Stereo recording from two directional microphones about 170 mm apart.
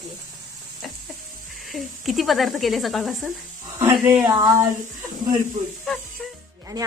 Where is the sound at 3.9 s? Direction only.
20° right (ahead or behind).